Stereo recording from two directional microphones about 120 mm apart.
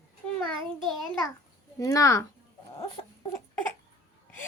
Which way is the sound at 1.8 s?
30° left (ahead or behind).